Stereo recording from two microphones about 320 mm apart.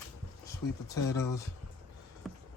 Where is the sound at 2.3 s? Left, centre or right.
Centre.